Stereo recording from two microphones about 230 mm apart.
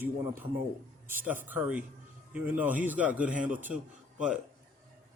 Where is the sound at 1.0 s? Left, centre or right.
Centre.